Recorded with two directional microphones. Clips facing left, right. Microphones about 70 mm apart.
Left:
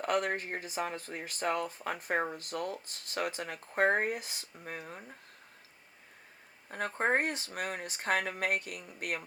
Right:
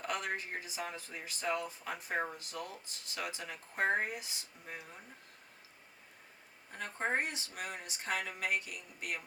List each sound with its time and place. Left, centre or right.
0.0 s speech: left
6.7 s speech: left